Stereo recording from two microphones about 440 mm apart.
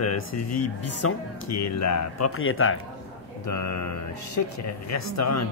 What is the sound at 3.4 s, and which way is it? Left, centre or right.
Speech, left.